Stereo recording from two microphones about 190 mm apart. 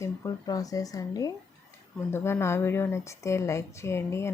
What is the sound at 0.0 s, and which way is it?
Speech, 15° left (ahead or behind).